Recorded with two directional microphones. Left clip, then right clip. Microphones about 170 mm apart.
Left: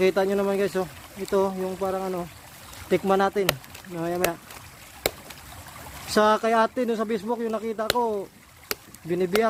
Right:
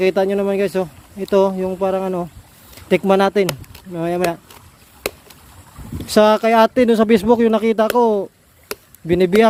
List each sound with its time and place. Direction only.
0.0 s speech: 30° right (ahead or behind)
6.1 s speech: 35° right (ahead or behind); by 9.3 s 50° right (ahead or behind)